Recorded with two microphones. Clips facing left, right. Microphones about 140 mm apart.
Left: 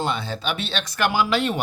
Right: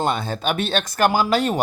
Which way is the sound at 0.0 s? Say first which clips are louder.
Right 3 dB; 50° right (ahead or behind).